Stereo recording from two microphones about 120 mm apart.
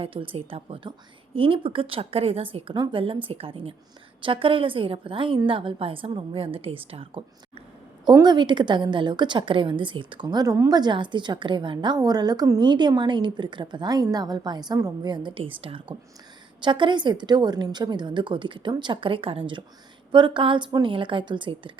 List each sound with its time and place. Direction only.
0.0 s a woman's voice: 50° right (ahead or behind)
8.0 s a woman's voice: 35° right (ahead or behind)